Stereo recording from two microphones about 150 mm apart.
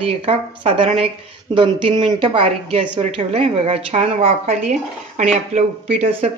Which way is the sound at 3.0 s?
45° right (ahead or behind).